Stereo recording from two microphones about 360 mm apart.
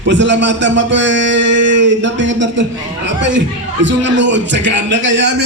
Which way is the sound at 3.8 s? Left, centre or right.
Right.